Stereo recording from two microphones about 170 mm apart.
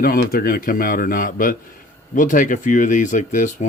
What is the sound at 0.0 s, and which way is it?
A man's voice, 60° left (ahead or behind).